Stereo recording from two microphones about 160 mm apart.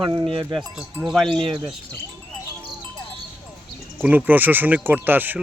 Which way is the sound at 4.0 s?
10° right (ahead or behind).